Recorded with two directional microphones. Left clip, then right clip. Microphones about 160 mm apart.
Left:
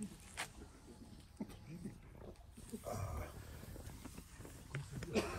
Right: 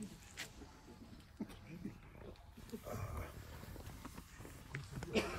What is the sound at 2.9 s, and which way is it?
Dog, 45° left (ahead or behind).